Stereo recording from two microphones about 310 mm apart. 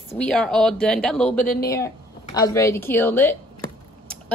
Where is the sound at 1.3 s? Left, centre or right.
Left.